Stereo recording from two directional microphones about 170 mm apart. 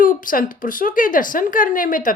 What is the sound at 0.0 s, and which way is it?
A woman's voice, 50° left (ahead or behind).